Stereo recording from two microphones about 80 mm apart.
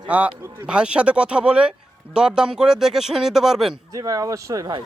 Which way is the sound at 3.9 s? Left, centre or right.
Right.